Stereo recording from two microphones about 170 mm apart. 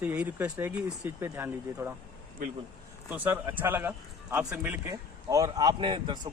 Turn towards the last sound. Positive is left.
turn(degrees=-25)  # may be behind; listen again after turning